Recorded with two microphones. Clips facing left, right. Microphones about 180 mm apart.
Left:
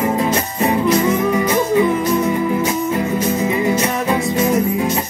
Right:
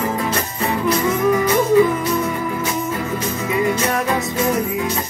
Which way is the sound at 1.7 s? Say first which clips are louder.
Right 3 dB; 20° left (ahead or behind).